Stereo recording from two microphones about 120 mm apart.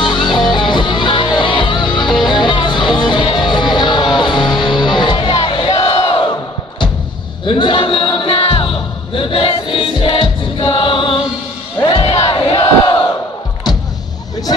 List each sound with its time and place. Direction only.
0.0 s music: 40° left (ahead or behind)
5.3 s crowd: 55° left (ahead or behind)
7.4 s music: 45° left (ahead or behind)
12.4 s crowd: 45° left (ahead or behind)